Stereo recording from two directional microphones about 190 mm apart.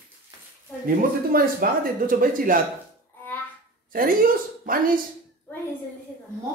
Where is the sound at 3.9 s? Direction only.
45° right (ahead or behind).